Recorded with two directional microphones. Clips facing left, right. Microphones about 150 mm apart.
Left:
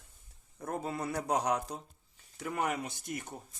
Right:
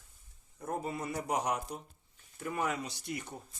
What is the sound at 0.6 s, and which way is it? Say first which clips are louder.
Speech: left 1 dB; 90° left.